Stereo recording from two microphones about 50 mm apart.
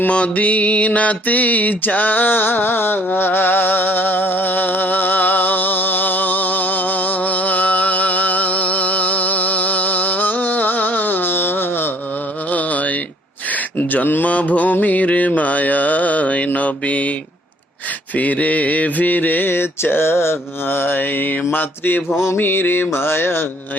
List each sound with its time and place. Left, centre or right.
0.1 s a sound: left
12.5 s mantra: left
18.2 s mantra: left